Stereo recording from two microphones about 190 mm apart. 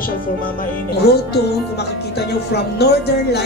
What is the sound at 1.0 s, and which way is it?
Speech, 60° left (ahead or behind).